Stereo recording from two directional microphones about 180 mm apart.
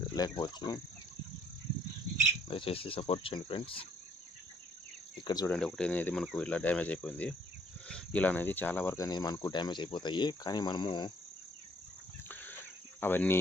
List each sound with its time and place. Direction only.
0.1 s speech: 20° left (ahead or behind)
2.5 s cricket: 30° left (ahead or behind)
5.2 s speech: 20° left (ahead or behind)
5.5 s speech: 5° left (ahead or behind); by 11.1 s 25° left (ahead or behind)
12.3 s insect: 10° left (ahead or behind)
13.0 s speech: 10° left (ahead or behind)